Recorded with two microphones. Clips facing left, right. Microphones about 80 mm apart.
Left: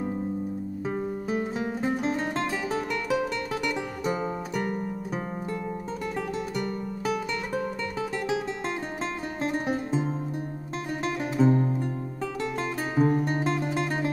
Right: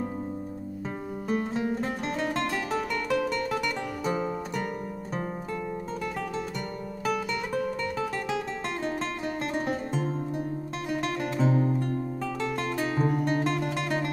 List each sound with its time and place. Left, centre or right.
1.3 s music: centre
7.1 s music: centre
9.4 s music: centre